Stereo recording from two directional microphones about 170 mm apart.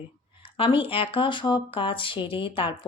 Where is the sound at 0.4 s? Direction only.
30° left (ahead or behind).